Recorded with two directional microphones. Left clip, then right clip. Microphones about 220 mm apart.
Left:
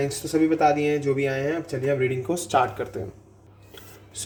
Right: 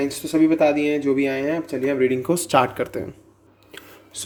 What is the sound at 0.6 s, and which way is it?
Speech, 40° right (ahead or behind).